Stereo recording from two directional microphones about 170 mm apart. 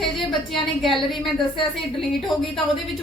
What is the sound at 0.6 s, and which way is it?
A woman's voice, centre (ahead or behind).